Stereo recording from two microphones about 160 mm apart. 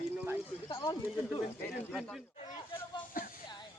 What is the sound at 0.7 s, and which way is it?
Speech, 20° left (ahead or behind).